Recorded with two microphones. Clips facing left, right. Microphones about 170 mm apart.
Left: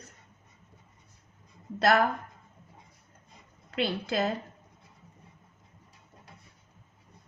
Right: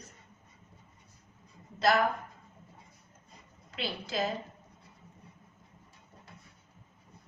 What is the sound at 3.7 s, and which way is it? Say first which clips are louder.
Speech: left 6 dB; 60° left (ahead or behind).